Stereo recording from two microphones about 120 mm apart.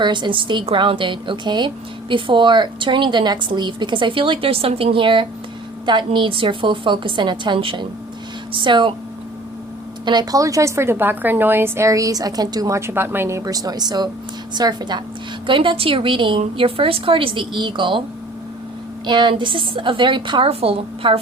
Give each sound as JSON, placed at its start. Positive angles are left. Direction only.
{"t": 0.0, "sound": "a woman's voice", "side_deg": -40}
{"t": 10.1, "sound": "a woman's voice", "side_deg": -30}
{"t": 19.0, "sound": "a woman's voice", "side_deg": -40}